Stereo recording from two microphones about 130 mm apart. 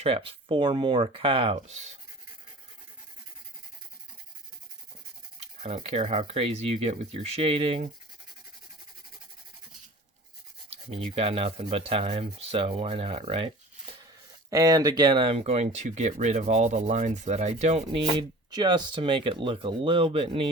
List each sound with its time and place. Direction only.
0.0 s speech: 45° right (ahead or behind)
1.6 s speech: 60° right (ahead or behind)
5.6 s speech: 50° right (ahead or behind)
10.7 s speech: 45° right (ahead or behind)
14.5 s speech: 25° right (ahead or behind); by 18.0 s 60° right (ahead or behind)
18.2 s speech: 35° right (ahead or behind)